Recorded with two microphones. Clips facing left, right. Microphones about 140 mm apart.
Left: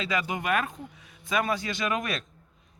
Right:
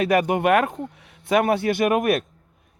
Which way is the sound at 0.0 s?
60° right (ahead or behind).